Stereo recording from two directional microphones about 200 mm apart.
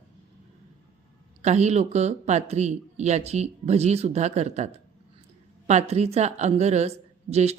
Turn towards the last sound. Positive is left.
turn(degrees=-30)  # may be behind; listen again after turning